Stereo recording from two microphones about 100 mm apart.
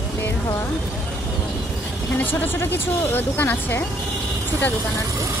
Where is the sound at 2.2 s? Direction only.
20° left (ahead or behind).